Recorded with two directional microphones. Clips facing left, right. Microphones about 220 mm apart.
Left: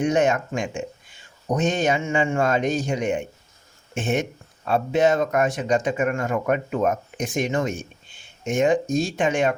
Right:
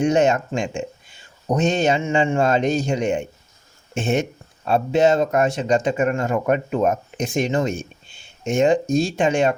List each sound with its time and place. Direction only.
0.0 s speech: 25° right (ahead or behind)